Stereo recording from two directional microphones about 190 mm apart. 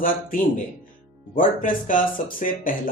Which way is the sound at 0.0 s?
45° left (ahead or behind).